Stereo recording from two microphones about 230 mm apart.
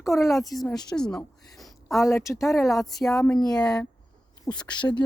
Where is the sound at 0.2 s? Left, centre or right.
Centre.